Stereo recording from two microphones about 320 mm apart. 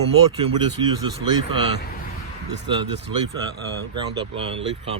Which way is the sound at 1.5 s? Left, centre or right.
Right.